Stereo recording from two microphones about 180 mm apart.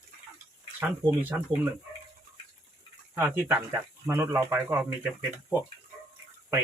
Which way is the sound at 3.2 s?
10° right (ahead or behind).